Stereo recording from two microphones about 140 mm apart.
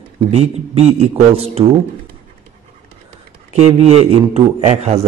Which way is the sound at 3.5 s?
50° right (ahead or behind).